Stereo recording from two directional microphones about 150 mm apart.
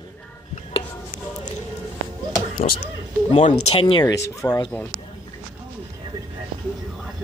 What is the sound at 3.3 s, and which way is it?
Speech, 45° left (ahead or behind).